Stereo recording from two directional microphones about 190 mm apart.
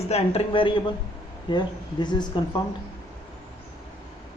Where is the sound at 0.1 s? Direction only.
30° left (ahead or behind).